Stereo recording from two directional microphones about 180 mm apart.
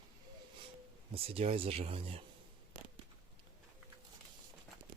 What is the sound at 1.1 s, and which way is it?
Speech, 35° right (ahead or behind).